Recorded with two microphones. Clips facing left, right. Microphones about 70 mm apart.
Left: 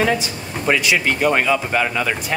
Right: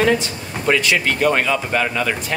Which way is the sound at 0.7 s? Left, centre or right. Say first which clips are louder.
Even; centre.